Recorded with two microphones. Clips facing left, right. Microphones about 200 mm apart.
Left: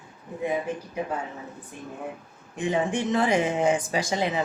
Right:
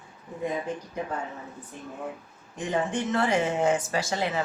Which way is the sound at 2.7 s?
10° left (ahead or behind).